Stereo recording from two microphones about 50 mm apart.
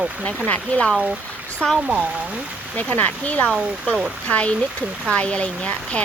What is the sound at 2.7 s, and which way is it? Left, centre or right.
Speech, left.